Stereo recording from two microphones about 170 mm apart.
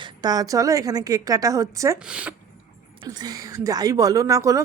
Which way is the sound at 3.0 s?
20° right (ahead or behind).